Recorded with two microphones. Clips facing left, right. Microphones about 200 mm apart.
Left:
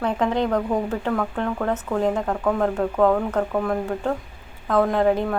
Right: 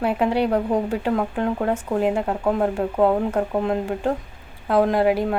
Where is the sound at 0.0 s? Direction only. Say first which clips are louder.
Right 2 dB; 10° right (ahead or behind).